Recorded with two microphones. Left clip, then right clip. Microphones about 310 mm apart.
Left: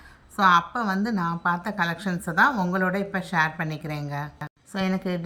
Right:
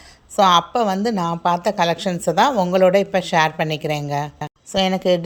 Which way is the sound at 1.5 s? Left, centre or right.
Centre.